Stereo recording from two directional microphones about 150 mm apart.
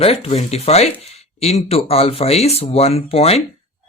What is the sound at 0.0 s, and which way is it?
Speech, 40° left (ahead or behind).